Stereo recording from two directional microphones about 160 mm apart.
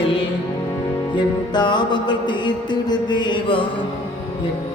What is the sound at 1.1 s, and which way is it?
Music, 30° left (ahead or behind).